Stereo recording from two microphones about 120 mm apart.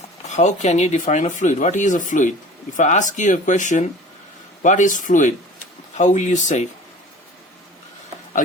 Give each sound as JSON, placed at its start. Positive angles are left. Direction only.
{"t": 0.3, "sound": "speech", "side_deg": 75}